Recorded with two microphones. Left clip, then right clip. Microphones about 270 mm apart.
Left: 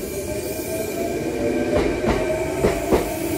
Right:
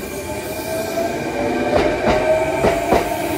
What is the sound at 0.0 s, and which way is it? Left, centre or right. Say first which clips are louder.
Train: right 1 dB; right.